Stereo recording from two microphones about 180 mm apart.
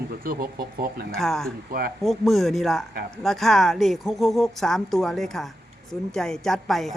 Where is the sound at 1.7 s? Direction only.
55° right (ahead or behind).